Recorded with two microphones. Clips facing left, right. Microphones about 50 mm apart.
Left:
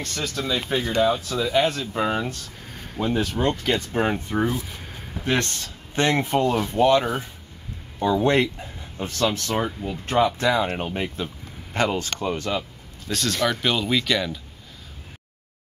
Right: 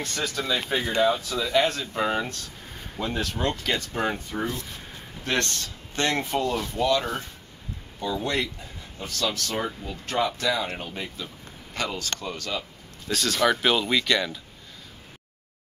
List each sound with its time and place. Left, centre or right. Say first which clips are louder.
0.0 s speech: left 1 dB; centre
3.8 s speech: left 4 dB; centre
6.7 s speech: left 6 dB; left
7.0 s speech: left 4 dB; centre
8.1 s speech: left 8 dB; left
13.1 s speech: right 1 dB; centre